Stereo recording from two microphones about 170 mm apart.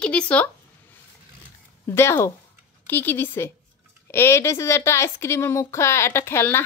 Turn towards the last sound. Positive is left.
turn(degrees=15)  # may be behind; listen again after turning